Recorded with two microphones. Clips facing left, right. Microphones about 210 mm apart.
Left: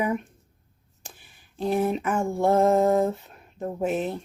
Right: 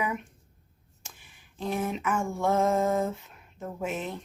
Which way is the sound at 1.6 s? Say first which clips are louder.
Left 6 dB; 35° left (ahead or behind).